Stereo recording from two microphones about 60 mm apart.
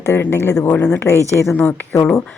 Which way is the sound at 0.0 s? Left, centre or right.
Left.